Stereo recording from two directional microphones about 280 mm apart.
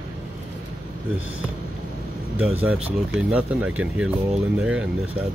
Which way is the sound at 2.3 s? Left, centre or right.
Centre.